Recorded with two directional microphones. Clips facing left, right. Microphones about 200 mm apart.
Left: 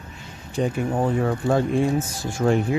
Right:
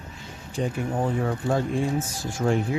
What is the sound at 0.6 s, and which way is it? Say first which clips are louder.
Speech: left 4 dB; 75° left (ahead or behind).